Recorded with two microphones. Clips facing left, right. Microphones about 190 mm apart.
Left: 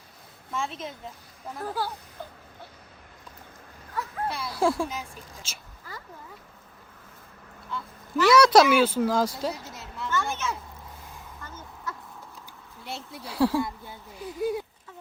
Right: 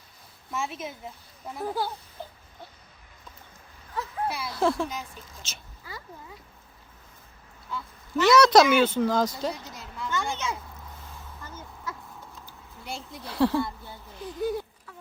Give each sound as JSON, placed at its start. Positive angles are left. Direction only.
{"t": 0.5, "sound": "a woman's voice", "side_deg": -5}
{"t": 4.3, "sound": "speech", "side_deg": -5}
{"t": 4.5, "sound": "speech", "side_deg": 5}
{"t": 7.7, "sound": "speech", "side_deg": 0}
{"t": 10.1, "sound": "a sound", "side_deg": -15}
{"t": 12.8, "sound": "speech", "side_deg": 0}